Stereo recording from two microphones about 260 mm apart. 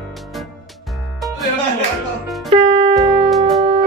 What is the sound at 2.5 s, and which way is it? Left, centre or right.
Music, centre.